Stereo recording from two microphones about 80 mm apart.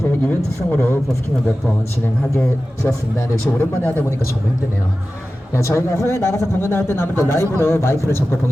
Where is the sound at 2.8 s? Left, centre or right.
Left.